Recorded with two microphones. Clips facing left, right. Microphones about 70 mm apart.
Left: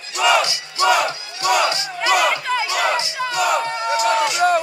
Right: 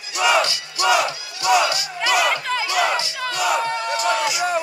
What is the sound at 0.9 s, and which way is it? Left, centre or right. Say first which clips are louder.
Battle cry: right 1 dB; left.